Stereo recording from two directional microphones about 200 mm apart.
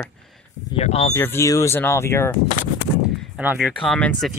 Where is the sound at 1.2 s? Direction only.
15° left (ahead or behind).